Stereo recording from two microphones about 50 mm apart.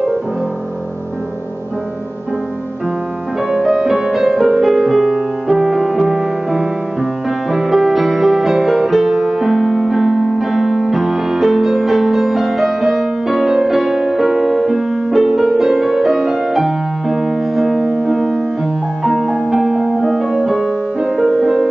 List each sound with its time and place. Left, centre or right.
3.5 s music: centre
6.1 s music: right
7.5 s music: centre
19.0 s music: centre
21.0 s music: right